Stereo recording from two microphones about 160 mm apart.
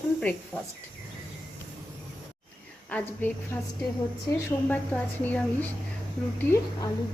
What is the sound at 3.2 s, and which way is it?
A woman's voice, 10° left (ahead or behind).